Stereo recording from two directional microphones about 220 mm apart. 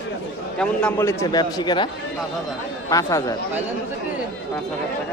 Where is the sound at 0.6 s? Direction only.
5° left (ahead or behind).